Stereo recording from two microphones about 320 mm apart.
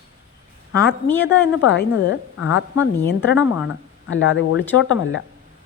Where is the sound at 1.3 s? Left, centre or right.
Left.